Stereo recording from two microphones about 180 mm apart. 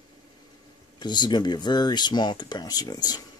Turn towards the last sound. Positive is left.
turn(degrees=20)  # may be behind; listen again after turning